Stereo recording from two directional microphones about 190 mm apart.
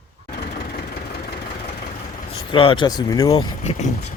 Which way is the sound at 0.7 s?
55° left (ahead or behind).